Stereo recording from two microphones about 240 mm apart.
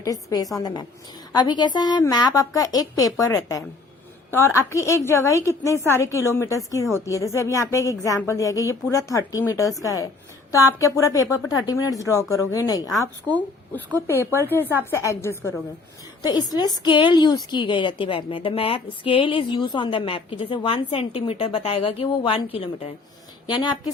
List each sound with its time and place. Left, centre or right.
0.0 s a woman's voice: centre